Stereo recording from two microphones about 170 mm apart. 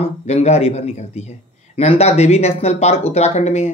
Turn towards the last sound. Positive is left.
turn(degrees=40)  # may be behind; listen again after turning